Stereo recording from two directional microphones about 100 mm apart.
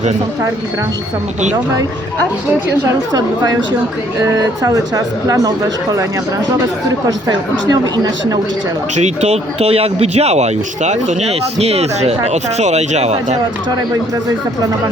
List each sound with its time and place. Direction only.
3.1 s speech: 40° right (ahead or behind)
7.3 s speech: 45° right (ahead or behind)
9.2 s speech: 90° right